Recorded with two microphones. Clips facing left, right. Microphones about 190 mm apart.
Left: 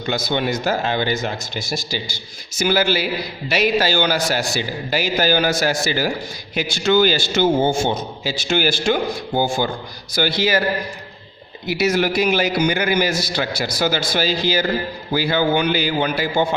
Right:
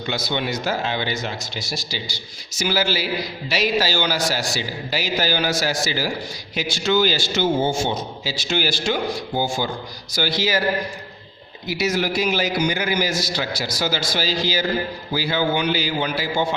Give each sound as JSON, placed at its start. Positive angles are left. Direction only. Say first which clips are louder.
{"t": 0.0, "sound": "a man's voice", "louder": "left 4 dB", "side_deg": 50}
{"t": 11.7, "sound": "a man's voice", "louder": "left 4 dB", "side_deg": 60}